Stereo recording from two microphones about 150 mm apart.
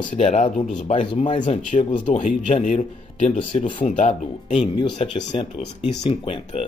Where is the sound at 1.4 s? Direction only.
55° left (ahead or behind).